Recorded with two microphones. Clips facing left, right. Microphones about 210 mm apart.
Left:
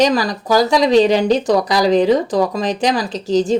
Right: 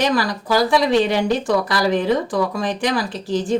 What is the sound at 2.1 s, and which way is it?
Speech, 40° left (ahead or behind).